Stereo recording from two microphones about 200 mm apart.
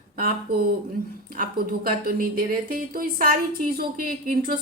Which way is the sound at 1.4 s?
45° right (ahead or behind).